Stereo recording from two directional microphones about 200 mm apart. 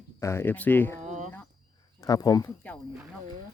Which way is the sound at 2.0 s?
20° left (ahead or behind).